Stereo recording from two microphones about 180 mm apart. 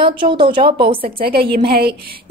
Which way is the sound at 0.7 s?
55° right (ahead or behind).